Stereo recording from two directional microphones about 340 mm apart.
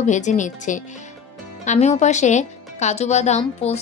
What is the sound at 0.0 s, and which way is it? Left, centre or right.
A woman's voice, left.